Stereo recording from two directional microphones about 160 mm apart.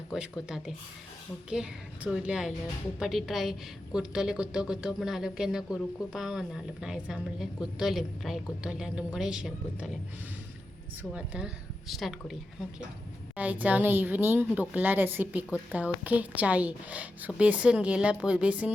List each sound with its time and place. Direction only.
0.1 s a woman's voice: 5° right (ahead or behind)
11.1 s a woman's voice: 5° right (ahead or behind)